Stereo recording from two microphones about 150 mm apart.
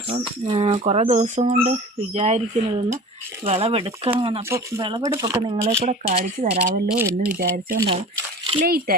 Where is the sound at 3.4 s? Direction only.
40° right (ahead or behind); by 5.7 s 20° right (ahead or behind).